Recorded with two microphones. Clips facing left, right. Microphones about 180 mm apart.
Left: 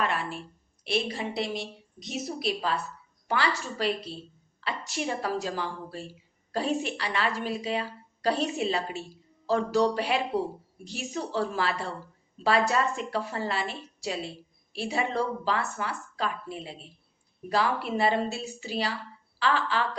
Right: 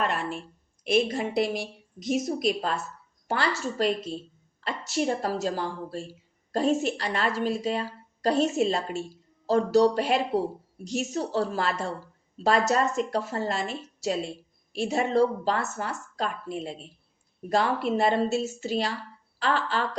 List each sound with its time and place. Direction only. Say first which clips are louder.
0.0 s a sound: right 1 dB; 40° right (ahead or behind)
1.0 s a woman's voice: right 5 dB; 50° right (ahead or behind)
17.5 s a woman's voice: right 3 dB; 40° right (ahead or behind)